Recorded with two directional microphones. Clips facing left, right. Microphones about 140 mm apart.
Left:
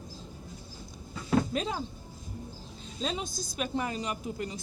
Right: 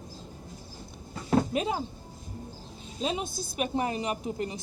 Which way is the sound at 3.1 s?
55° right (ahead or behind).